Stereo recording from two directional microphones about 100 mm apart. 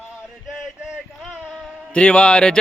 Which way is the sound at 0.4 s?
Centre (ahead or behind).